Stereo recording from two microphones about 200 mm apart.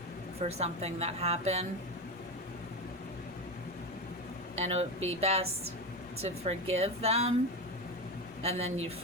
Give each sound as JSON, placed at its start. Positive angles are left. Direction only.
{"t": 0.4, "sound": "a woman's voice", "side_deg": -30}
{"t": 4.5, "sound": "a woman's voice", "side_deg": -35}
{"t": 8.4, "sound": "a woman's voice", "side_deg": -30}